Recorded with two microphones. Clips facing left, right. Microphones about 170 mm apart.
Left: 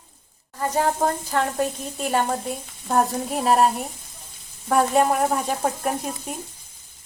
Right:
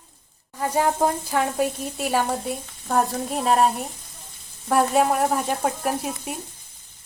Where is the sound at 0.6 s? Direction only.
10° right (ahead or behind).